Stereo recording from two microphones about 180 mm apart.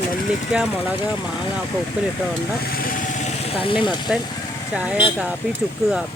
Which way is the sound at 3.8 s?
25° left (ahead or behind).